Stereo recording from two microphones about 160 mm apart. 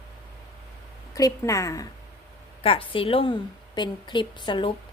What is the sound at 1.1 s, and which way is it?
Speech, 20° left (ahead or behind).